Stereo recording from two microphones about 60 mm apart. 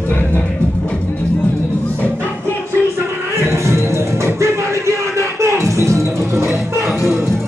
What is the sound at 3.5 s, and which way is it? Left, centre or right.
Music, right.